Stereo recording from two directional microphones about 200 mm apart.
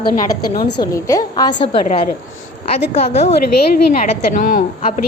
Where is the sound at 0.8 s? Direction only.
15° left (ahead or behind).